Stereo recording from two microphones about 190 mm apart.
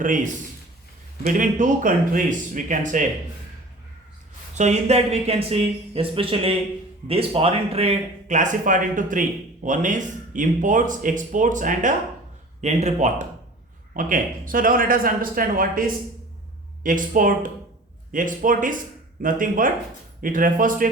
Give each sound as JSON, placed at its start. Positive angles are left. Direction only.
{"t": 1.2, "sound": "speech", "side_deg": -45}
{"t": 4.5, "sound": "speech", "side_deg": -35}
{"t": 16.8, "sound": "speech", "side_deg": -45}